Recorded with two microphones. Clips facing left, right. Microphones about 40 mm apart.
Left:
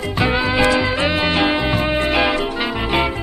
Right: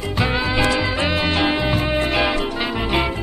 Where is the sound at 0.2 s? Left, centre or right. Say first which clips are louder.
Left 3 dB; centre.